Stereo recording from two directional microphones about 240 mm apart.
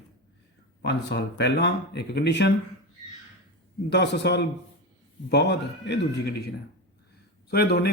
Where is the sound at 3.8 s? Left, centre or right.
Left.